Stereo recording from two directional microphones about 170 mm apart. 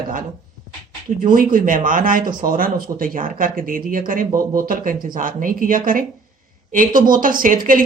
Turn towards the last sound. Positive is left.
turn(degrees=-55)  # may be behind; listen again after turning